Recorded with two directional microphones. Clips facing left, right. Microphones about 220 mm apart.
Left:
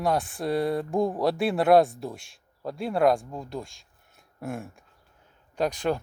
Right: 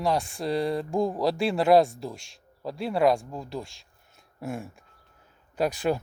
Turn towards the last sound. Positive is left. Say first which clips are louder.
# right 1 dB
turn(degrees=-5)  # may be behind; listen again after turning